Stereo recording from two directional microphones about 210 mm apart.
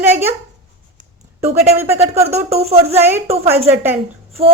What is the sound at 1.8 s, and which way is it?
Speech, 10° right (ahead or behind).